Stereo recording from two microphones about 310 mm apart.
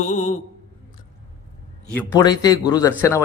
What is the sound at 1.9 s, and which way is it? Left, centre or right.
A man's voice, centre.